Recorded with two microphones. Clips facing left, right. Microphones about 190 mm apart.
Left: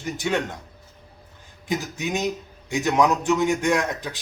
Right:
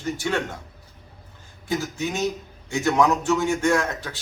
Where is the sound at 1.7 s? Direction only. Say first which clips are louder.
Even; 20° left (ahead or behind).